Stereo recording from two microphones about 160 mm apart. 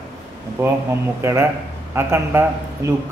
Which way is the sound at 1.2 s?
15° right (ahead or behind).